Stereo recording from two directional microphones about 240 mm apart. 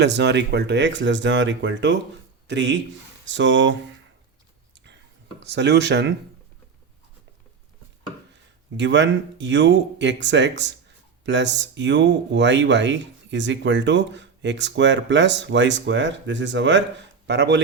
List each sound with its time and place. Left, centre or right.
0.0 s speech: right
4.7 s a sound: right
5.4 s speech: right
8.7 s speech: right